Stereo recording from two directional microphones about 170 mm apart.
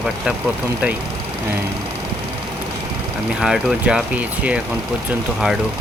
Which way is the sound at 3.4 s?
5° right (ahead or behind).